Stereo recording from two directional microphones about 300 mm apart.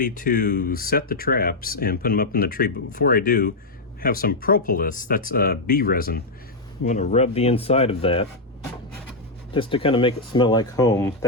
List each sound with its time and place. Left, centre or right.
0.0 s speech: left
9.5 s speech: centre